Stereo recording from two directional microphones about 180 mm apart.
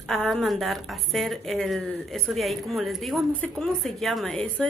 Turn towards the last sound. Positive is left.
turn(degrees=5)  # may be behind; listen again after turning